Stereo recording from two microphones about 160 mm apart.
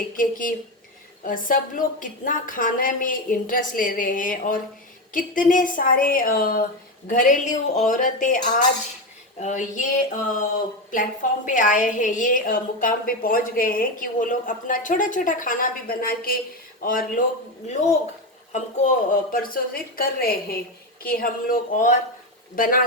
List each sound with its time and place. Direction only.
0.2 s a woman's voice: 60° left (ahead or behind)
7.1 s speech: 55° left (ahead or behind)
10.9 s a woman's voice: 55° left (ahead or behind)
18.5 s a woman's voice: 50° left (ahead or behind)